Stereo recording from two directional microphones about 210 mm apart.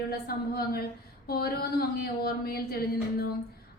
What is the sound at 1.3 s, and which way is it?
Speech, 45° left (ahead or behind).